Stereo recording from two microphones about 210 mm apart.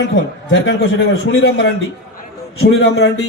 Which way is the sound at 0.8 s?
60° left (ahead or behind).